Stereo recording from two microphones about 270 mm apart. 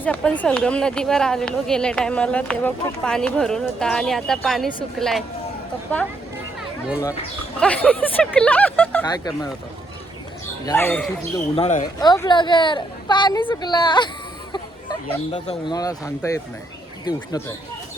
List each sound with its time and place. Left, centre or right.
0.0 s a woman's voice: centre
7.6 s speech: centre
10.7 s a woman's voice: centre
11.5 s speech: left
11.9 s a woman's voice: centre